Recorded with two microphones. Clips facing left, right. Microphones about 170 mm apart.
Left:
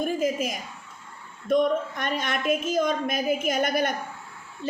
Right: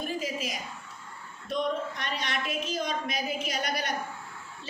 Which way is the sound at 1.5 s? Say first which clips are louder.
Left 8 dB; 50° left (ahead or behind).